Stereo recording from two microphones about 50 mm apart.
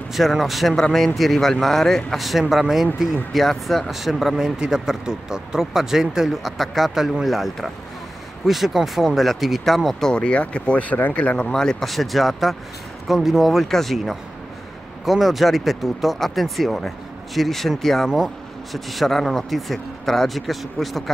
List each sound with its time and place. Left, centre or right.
0.1 s speech: centre
2.1 s speech: centre
10.0 s speech: centre
11.1 s speech: left
11.8 s speech: centre